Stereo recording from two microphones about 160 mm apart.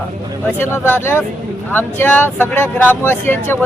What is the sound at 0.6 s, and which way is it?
Speech, 15° left (ahead or behind).